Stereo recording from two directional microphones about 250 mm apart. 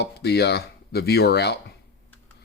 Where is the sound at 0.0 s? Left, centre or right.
Left.